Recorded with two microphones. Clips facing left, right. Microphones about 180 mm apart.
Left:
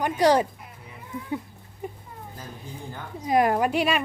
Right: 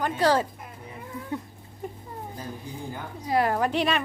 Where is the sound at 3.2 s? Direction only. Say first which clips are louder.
Left 3 dB; 15° left (ahead or behind).